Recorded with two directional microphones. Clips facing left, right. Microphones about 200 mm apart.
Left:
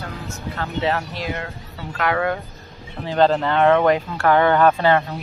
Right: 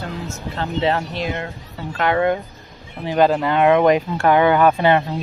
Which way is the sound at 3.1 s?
10° right (ahead or behind).